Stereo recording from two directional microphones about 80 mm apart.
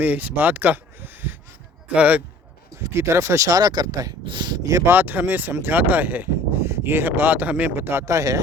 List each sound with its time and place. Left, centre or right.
0.0 s speech: right
2.8 s speech: right
4.3 s speech: right
4.9 s speech: right
8.0 s speech: right